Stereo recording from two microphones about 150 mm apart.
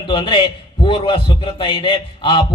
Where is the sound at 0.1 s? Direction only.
30° left (ahead or behind).